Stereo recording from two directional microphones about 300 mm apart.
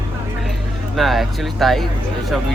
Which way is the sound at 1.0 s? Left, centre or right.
Centre.